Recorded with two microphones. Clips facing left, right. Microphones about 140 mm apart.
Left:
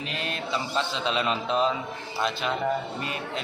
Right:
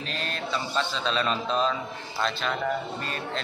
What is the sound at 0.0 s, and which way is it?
A man's voice, 15° left (ahead or behind).